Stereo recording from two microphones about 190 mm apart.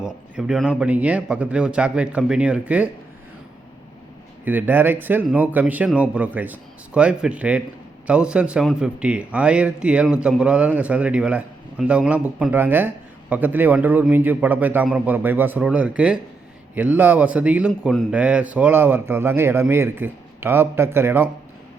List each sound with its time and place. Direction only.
0.0 s a man's voice: centre (ahead or behind)
4.4 s a man's voice: 10° right (ahead or behind)